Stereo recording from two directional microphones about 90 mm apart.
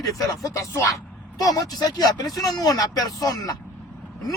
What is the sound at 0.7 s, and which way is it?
Speech, 30° left (ahead or behind).